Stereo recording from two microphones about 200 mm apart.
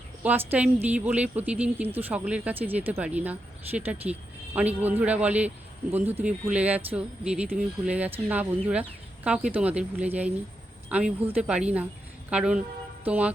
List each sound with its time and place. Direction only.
0.2 s speech: 10° right (ahead or behind)